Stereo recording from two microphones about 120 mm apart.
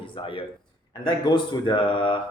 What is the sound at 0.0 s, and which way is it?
Speech, 45° left (ahead or behind).